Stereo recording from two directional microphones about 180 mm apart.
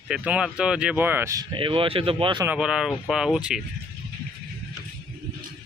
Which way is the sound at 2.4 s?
5° right (ahead or behind).